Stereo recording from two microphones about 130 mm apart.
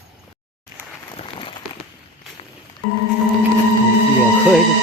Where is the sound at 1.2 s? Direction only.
45° left (ahead or behind).